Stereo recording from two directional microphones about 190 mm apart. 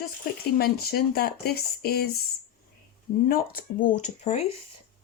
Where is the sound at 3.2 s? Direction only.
50° left (ahead or behind).